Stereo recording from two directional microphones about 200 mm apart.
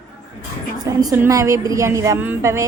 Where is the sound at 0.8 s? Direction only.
20° right (ahead or behind).